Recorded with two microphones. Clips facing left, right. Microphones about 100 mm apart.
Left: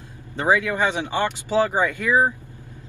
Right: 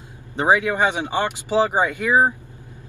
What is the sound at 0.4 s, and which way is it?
Speech, 20° right (ahead or behind).